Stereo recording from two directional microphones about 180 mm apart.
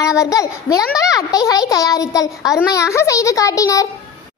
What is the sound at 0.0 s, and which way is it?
A child's voice, 15° left (ahead or behind).